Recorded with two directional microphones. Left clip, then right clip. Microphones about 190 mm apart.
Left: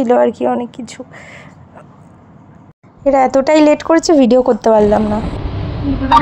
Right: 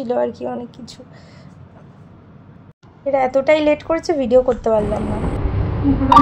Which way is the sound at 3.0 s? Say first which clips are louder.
Left 6 dB; 50° left (ahead or behind).